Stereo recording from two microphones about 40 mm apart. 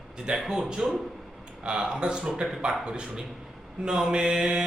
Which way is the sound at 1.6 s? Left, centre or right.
Right.